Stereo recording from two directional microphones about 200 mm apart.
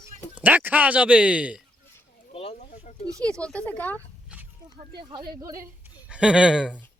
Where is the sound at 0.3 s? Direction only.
10° right (ahead or behind).